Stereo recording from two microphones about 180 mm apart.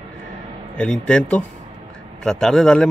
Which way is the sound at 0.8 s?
5° left (ahead or behind).